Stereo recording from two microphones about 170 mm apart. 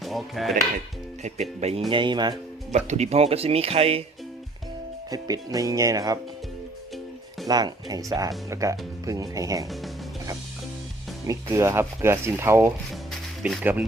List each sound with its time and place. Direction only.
0.0 s speech: centre (ahead or behind)
1.2 s speech: 40° right (ahead or behind)
1.9 s speech: 30° right (ahead or behind)
2.7 s speech: 40° right (ahead or behind)
5.1 s speech: 20° right (ahead or behind)
7.4 s speech: 20° right (ahead or behind)
11.3 s speech: 15° right (ahead or behind)
12.9 s music: centre (ahead or behind)